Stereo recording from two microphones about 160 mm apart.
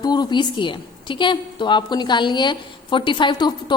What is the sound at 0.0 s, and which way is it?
A woman's voice, 25° left (ahead or behind).